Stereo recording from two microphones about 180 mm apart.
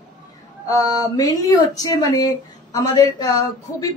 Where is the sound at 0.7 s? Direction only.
20° left (ahead or behind).